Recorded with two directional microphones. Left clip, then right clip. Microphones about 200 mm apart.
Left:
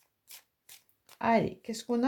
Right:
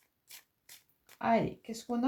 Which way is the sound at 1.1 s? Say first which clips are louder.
Left 2 dB; 40° left (ahead or behind).